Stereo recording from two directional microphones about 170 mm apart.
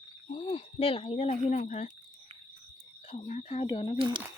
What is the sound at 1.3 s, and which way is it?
Speech, 45° left (ahead or behind).